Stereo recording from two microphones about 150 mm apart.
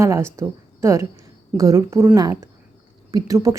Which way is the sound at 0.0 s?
20° right (ahead or behind).